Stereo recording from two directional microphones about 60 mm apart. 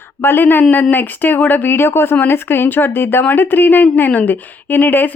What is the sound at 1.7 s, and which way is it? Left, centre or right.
A woman's voice, left.